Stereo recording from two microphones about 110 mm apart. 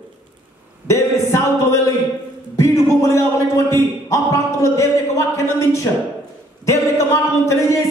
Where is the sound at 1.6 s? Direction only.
30° left (ahead or behind).